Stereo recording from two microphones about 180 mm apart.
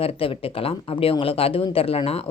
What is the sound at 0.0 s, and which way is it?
Speech, 30° left (ahead or behind).